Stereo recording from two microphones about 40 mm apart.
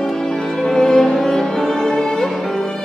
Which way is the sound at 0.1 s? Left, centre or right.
Centre.